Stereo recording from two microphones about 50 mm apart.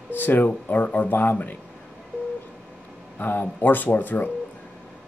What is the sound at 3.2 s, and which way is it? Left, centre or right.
Speech, left.